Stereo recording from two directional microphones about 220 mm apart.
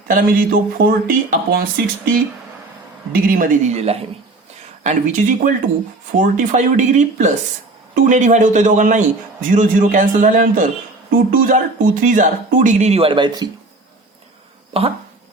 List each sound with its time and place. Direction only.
0.1 s speech: 40° right (ahead or behind)
3.1 s speech: 40° right (ahead or behind); by 13.5 s 20° right (ahead or behind)
14.7 s speech: 25° right (ahead or behind)